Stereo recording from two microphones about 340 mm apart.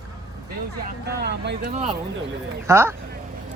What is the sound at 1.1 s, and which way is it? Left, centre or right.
Speech, right.